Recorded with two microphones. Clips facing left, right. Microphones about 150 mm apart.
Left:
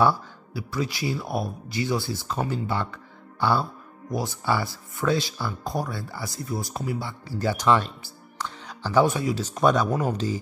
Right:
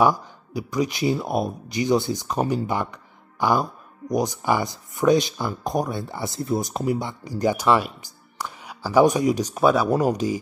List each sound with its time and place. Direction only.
0.0 s speech: 15° right (ahead or behind)